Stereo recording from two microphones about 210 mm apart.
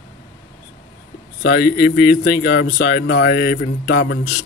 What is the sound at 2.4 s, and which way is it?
Speech, 55° left (ahead or behind).